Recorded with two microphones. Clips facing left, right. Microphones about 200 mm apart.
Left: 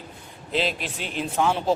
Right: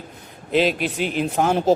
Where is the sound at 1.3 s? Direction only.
45° right (ahead or behind).